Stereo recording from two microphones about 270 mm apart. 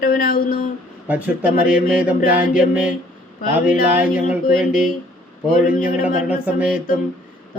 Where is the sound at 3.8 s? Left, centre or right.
Centre.